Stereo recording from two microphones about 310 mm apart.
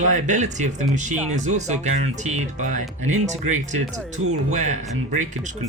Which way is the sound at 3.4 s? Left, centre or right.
Right.